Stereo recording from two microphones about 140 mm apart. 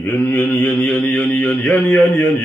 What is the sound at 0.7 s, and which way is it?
A man's voice, 5° left (ahead or behind).